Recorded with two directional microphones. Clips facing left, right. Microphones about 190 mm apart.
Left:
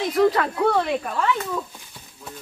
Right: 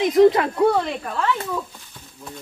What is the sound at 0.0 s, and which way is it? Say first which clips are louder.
Speech: right 5 dB; 20° right (ahead or behind).